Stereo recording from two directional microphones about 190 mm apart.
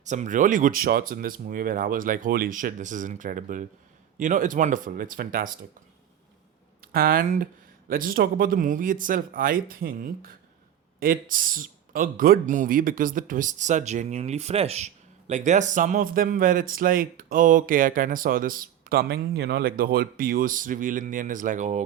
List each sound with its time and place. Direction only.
0.0 s speech: 40° right (ahead or behind)
6.8 s speech: 50° right (ahead or behind)